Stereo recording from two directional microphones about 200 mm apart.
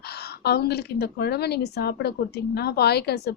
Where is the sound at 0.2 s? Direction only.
55° left (ahead or behind).